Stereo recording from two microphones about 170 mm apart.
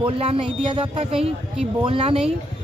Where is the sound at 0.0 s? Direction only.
30° right (ahead or behind).